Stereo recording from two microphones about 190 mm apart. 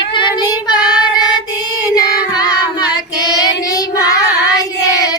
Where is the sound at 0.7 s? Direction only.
20° left (ahead or behind).